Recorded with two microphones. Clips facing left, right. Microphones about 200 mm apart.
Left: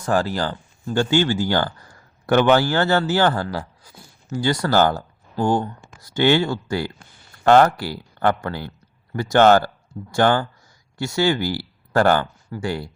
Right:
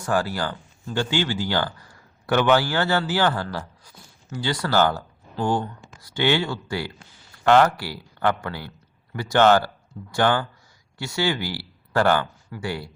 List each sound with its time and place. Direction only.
0.0 s speech: 40° left (ahead or behind)